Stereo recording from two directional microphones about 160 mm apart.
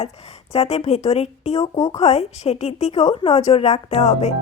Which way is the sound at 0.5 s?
40° left (ahead or behind).